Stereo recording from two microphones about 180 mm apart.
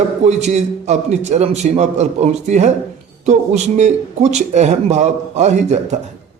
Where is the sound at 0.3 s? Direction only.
40° right (ahead or behind).